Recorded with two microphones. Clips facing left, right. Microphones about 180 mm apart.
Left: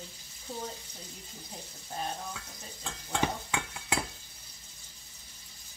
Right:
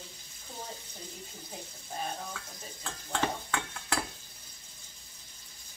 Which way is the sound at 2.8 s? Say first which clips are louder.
Left 1 dB; 15° left (ahead or behind).